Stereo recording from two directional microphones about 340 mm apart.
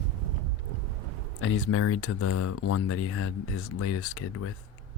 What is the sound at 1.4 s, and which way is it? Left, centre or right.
Speech, left.